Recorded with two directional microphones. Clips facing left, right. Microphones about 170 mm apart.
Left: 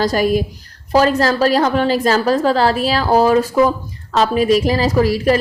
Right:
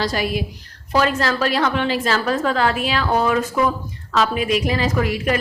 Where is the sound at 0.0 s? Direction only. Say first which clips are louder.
Left 7 dB; 40° left (ahead or behind).